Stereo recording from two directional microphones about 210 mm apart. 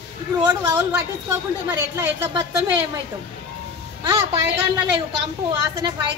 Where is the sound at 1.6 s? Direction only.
10° right (ahead or behind).